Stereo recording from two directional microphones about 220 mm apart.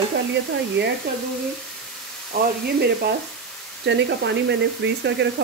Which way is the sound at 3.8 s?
50° right (ahead or behind).